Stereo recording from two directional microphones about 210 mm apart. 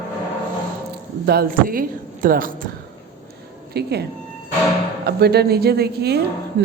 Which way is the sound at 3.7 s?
50° right (ahead or behind).